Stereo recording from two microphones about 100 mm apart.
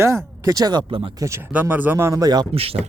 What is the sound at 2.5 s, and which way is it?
Speech, 75° right (ahead or behind).